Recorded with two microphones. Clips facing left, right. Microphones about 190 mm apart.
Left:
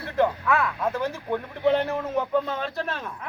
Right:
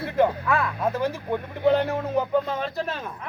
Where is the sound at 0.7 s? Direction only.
20° right (ahead or behind).